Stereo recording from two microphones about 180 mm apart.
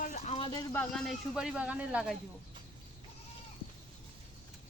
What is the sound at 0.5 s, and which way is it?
A man's voice, 10° left (ahead or behind).